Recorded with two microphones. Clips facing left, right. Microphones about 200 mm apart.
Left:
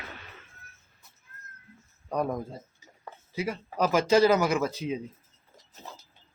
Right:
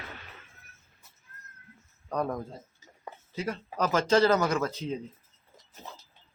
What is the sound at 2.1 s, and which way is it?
Speech, 10° left (ahead or behind).